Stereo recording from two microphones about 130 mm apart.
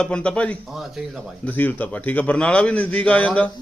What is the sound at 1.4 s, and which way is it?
Speech, 15° left (ahead or behind).